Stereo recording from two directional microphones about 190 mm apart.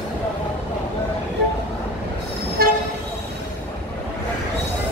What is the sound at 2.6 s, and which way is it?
Toot, 55° right (ahead or behind).